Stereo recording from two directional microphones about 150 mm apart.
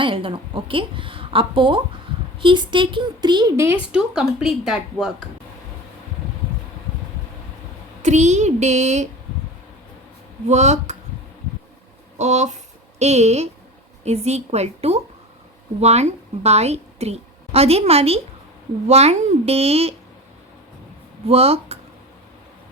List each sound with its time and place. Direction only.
0.0 s a woman's voice: 35° right (ahead or behind)
3.6 s speech: 15° right (ahead or behind)
4.1 s speech: 5° right (ahead or behind)
8.0 s a child's voice: 50° right (ahead or behind)
10.4 s a child's voice: 50° right (ahead or behind)
12.1 s a child's voice: 50° right (ahead or behind)
21.2 s a woman's voice: 40° right (ahead or behind)